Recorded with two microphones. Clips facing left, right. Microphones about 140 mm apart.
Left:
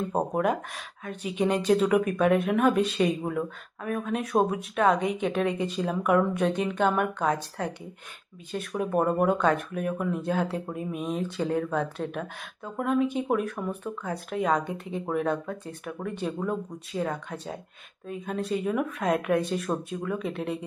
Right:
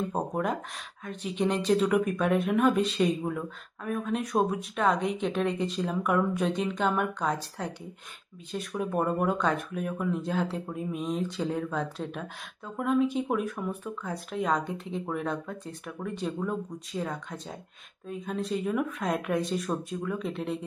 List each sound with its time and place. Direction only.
1.0 s speech: 5° left (ahead or behind)
17.0 s speech: 70° left (ahead or behind)
18.1 s speech: centre (ahead or behind)